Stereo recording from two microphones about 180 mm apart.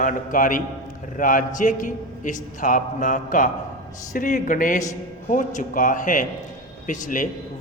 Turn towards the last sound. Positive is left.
turn(degrees=45)  # may be behind; listen again after turning